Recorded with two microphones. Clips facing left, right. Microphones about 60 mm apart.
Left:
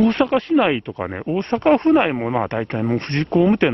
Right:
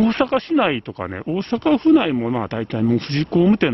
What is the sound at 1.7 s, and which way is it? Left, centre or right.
Speech, left.